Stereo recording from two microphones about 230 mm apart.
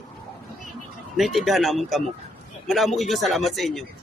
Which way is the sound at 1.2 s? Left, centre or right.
Centre.